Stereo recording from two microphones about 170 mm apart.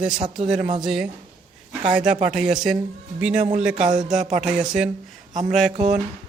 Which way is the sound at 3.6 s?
5° right (ahead or behind).